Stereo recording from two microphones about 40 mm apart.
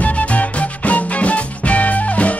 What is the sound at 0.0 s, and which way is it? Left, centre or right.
Music, left.